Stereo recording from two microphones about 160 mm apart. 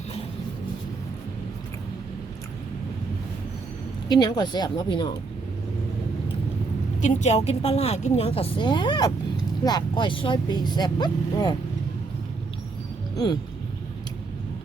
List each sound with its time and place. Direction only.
4.1 s a woman's voice: 25° left (ahead or behind)
7.0 s a woman's voice: 45° left (ahead or behind); by 11.5 s 25° left (ahead or behind)
13.1 s speech: 25° left (ahead or behind)